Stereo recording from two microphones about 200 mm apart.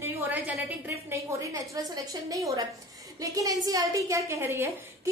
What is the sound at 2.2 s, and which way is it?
A woman's voice, 15° right (ahead or behind).